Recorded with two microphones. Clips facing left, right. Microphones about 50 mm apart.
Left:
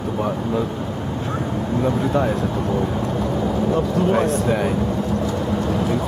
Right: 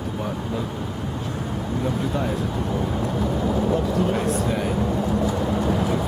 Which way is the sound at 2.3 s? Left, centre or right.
Centre.